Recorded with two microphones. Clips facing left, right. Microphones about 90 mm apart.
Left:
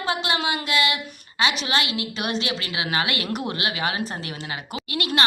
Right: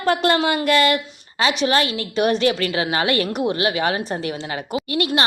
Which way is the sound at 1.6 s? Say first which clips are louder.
Right 6 dB; 40° right (ahead or behind).